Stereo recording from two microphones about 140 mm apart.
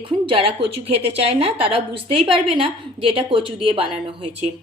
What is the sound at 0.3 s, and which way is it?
A woman's voice, 40° right (ahead or behind).